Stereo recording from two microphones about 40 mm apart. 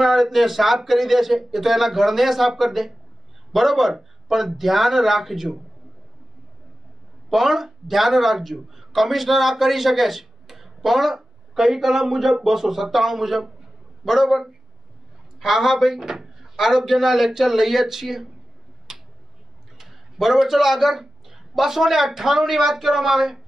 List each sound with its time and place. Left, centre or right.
0.0 s speech: centre
7.2 s speech: centre
18.9 s tick-tock: centre
19.8 s a man's voice: centre